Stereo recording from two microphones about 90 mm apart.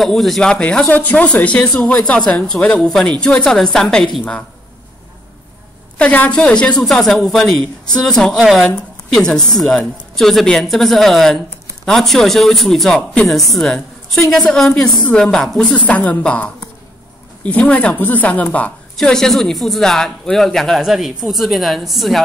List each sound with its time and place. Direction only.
0.0 s speech: centre (ahead or behind)
5.9 s speech: 15° left (ahead or behind)
15.9 s speech: 15° left (ahead or behind)
18.9 s speech: 5° left (ahead or behind)